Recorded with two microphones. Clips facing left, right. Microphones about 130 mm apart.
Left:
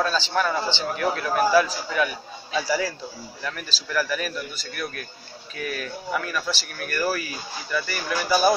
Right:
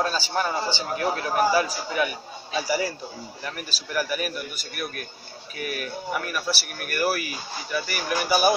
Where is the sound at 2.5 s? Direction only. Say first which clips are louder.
Left 1 dB; 15° right (ahead or behind).